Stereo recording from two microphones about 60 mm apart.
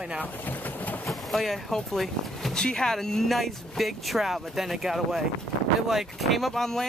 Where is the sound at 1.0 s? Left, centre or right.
Centre.